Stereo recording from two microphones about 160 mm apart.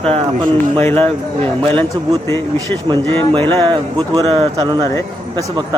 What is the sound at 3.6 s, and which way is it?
Speech, 25° right (ahead or behind).